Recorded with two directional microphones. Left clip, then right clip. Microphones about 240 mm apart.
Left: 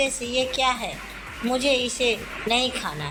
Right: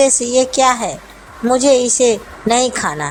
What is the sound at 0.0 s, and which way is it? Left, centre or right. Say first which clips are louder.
A woman's voice: right 11 dB; right.